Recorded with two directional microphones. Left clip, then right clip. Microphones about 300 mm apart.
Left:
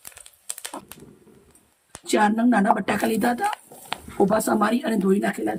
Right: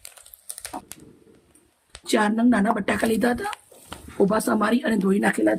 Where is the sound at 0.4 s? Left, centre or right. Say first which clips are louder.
Even; centre.